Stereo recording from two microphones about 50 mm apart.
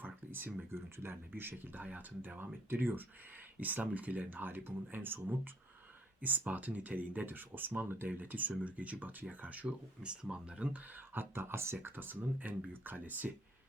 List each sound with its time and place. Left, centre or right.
0.0 s a sound: right
0.7 s speech: right
1.1 s speech: right
6.2 s speech: right
10.0 s speech: centre
10.9 s speech: right